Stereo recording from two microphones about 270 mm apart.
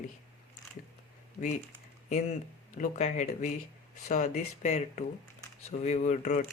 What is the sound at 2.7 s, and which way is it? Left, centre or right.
Speech, left.